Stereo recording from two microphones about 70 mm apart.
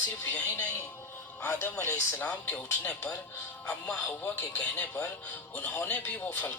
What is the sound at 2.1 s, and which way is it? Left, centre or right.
Speech, centre.